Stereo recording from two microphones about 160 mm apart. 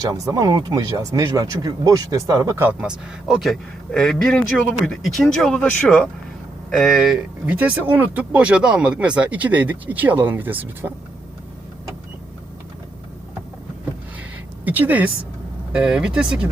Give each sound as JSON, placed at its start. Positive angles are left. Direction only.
{"t": 0.0, "sound": "speech", "side_deg": -20}
{"t": 2.6, "sound": "speech", "side_deg": -5}
{"t": 14.6, "sound": "speech", "side_deg": -10}